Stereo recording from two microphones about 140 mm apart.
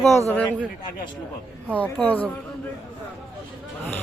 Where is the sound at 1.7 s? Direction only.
10° left (ahead or behind).